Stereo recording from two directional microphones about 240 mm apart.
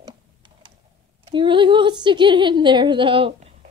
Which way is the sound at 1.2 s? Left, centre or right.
Centre.